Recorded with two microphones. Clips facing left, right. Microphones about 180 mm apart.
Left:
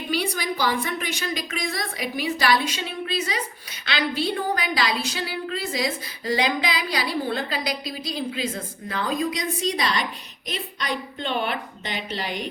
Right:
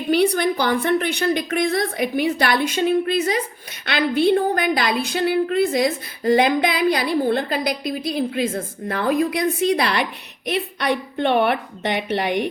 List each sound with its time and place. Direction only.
0.1 s a woman's voice: 60° right (ahead or behind)